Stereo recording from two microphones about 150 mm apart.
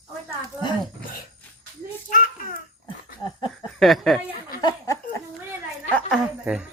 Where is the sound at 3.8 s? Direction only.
Centre (ahead or behind).